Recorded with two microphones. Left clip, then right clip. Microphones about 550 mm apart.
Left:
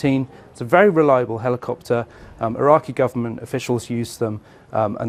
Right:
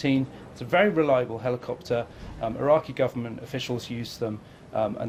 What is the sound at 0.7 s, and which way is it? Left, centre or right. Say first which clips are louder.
Speech: left 7 dB; left.